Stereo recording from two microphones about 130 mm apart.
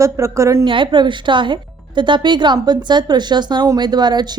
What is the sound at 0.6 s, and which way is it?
A woman's voice, 40° right (ahead or behind).